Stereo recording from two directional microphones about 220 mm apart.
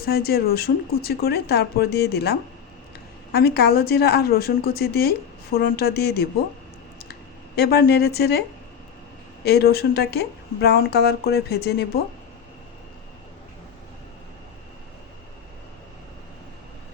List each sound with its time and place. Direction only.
0.0 s speech: 45° left (ahead or behind)